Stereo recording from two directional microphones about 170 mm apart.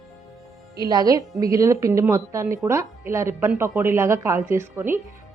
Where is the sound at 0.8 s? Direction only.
25° right (ahead or behind).